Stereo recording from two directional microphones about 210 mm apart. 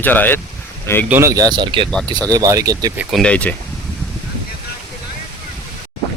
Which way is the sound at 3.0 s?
Centre (ahead or behind).